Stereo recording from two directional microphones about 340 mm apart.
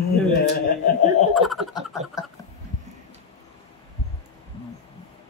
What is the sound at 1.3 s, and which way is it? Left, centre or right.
Speech, centre.